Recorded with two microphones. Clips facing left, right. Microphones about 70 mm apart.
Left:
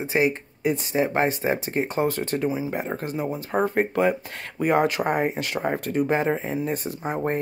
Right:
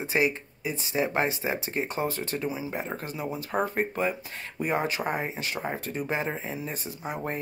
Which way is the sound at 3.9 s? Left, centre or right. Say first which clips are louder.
Left 7 dB; left.